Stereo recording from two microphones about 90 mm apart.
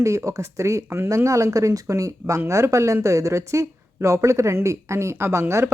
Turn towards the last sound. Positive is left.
turn(degrees=-30)  # may be behind; listen again after turning